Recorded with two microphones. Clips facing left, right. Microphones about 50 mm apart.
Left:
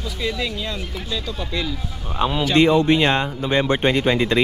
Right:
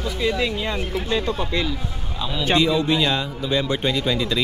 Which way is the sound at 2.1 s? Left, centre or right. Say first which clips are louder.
Left 3 dB; left.